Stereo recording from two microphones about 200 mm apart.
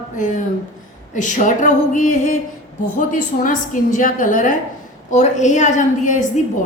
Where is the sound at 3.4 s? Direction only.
40° left (ahead or behind).